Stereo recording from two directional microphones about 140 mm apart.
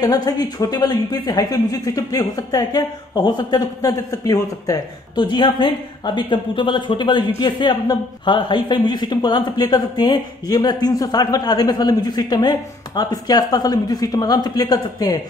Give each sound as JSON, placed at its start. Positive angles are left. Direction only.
{"t": 0.0, "sound": "speech", "side_deg": 25}